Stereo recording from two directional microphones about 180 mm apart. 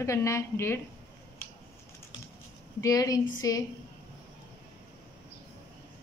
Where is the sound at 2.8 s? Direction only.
20° left (ahead or behind).